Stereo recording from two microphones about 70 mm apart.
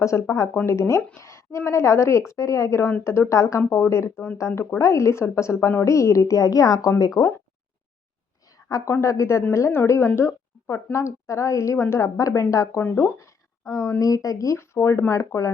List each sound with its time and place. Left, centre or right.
0.0 s a woman's voice: left
8.4 s a sound: left
8.9 s a woman's voice: left
10.2 s a sound: left
10.9 s a woman's voice: left
12.0 s a woman's voice: left